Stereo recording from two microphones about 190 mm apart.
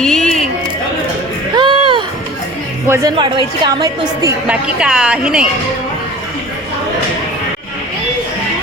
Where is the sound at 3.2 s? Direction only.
25° right (ahead or behind).